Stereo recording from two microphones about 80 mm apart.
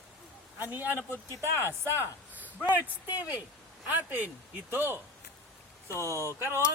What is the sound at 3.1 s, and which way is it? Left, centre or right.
Speech, centre.